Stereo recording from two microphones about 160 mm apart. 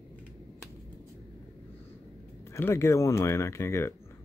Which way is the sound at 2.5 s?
15° left (ahead or behind).